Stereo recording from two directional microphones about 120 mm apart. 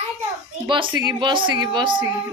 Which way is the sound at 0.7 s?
45° right (ahead or behind).